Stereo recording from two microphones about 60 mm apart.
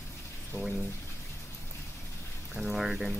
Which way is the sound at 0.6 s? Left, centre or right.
Left.